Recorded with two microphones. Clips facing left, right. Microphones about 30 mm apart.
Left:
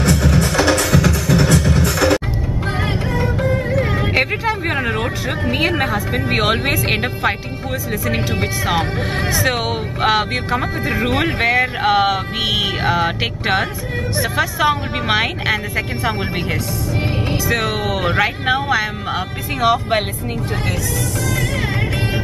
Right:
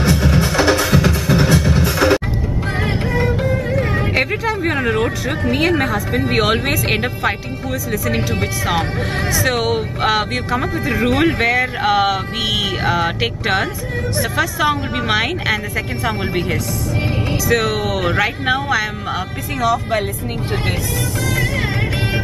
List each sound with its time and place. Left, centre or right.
0.0 s music: centre
1.4 s music: centre
3.2 s music: centre
3.8 s vehicle: centre
4.6 s music: centre
6.1 s speech: centre
19.6 s speech: left